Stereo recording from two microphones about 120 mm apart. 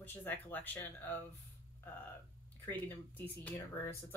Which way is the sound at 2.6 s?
15° left (ahead or behind).